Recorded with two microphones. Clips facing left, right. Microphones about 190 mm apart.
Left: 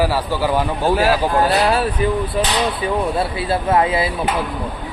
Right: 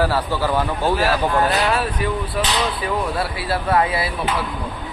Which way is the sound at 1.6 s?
30° left (ahead or behind).